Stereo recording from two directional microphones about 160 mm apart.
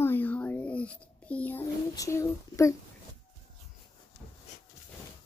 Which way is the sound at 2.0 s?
20° left (ahead or behind).